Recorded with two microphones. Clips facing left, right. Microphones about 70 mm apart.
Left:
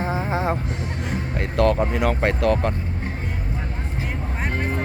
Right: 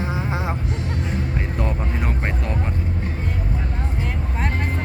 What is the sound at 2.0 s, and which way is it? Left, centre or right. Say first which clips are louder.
Speech: left 6 dB; left.